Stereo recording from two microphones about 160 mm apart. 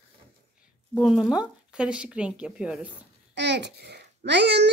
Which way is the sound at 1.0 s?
Centre (ahead or behind).